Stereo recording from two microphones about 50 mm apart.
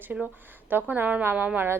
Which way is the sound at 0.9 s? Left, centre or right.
Right.